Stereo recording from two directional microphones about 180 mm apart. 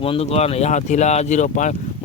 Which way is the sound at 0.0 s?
35° left (ahead or behind).